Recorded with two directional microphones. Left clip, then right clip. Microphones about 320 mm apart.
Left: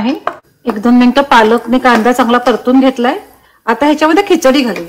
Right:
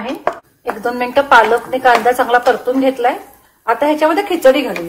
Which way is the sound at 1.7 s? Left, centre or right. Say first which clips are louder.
Left 2 dB; left.